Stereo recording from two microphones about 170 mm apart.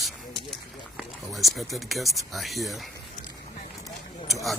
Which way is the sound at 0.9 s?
Centre (ahead or behind).